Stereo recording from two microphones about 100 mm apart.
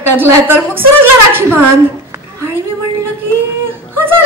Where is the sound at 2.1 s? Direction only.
20° right (ahead or behind).